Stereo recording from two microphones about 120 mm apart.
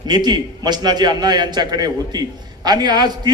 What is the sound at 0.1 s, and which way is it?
A man's voice, 35° right (ahead or behind).